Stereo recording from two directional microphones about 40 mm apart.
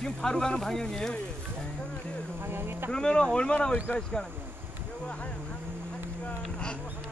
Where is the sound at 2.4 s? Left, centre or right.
Right.